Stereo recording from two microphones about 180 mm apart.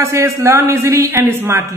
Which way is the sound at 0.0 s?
15° right (ahead or behind).